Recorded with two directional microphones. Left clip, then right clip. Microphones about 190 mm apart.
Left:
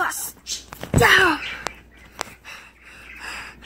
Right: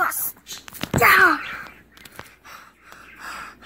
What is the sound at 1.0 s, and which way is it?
Wail, 45° right (ahead or behind).